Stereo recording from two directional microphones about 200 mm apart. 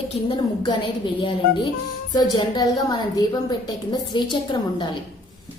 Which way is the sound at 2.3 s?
20° left (ahead or behind).